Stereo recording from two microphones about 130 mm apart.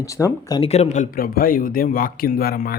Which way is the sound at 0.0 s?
25° left (ahead or behind).